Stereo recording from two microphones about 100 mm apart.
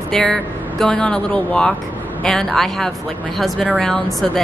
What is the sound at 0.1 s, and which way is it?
A woman's voice, 5° left (ahead or behind).